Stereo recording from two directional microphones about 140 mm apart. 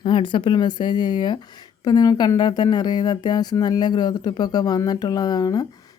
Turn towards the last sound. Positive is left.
turn(degrees=30)  # may be behind; listen again after turning